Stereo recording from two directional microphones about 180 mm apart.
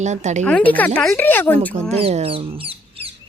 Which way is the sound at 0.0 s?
40° right (ahead or behind).